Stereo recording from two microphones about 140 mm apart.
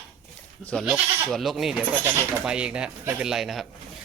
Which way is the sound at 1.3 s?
Centre (ahead or behind).